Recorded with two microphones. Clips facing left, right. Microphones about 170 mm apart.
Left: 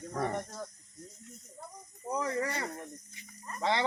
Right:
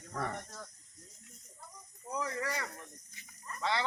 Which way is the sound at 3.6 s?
35° left (ahead or behind).